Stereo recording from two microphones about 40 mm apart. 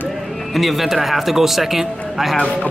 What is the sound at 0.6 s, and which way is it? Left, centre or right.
A man's voice, centre.